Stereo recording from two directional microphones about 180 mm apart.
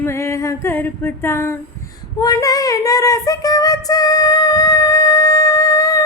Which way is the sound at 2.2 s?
20° left (ahead or behind).